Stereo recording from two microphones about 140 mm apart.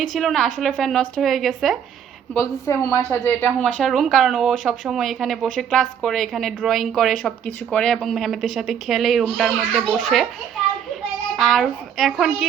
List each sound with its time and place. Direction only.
0.2 s speech: centre (ahead or behind)
2.3 s a woman's voice: 20° left (ahead or behind)
3.1 s speech: 10° left (ahead or behind)
11.3 s speech: centre (ahead or behind)